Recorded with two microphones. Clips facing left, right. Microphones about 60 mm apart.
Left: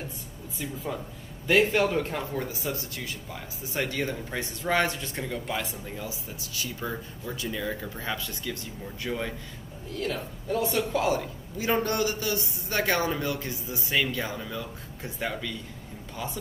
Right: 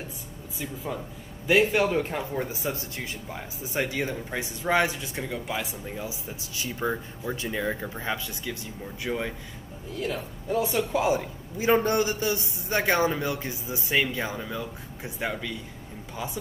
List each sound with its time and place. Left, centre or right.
1.5 s speech: centre; by 3.4 s right
3.7 s a man's voice: centre